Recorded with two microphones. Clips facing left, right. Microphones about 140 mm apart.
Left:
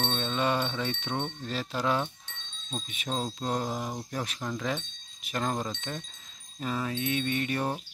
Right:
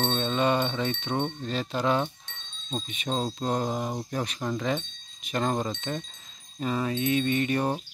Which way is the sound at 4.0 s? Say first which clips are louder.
Right 4 dB; centre (ahead or behind).